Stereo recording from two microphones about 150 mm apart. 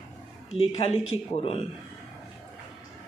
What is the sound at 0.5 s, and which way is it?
Speech, 40° left (ahead or behind).